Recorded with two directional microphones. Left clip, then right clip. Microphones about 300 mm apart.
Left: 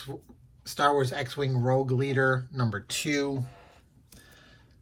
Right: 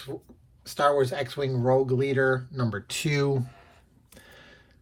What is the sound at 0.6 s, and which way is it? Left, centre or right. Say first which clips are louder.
Speech: right 2 dB; centre.